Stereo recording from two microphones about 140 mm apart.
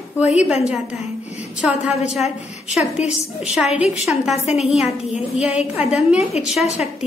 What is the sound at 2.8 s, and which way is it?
Speech, 50° left (ahead or behind).